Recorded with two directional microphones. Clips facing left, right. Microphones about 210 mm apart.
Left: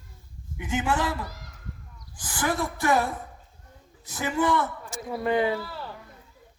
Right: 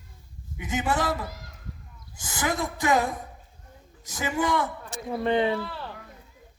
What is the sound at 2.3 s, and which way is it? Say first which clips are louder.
Speech: left 1 dB; 15° right (ahead or behind).